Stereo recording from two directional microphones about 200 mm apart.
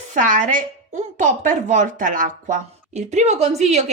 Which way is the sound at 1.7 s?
40° right (ahead or behind).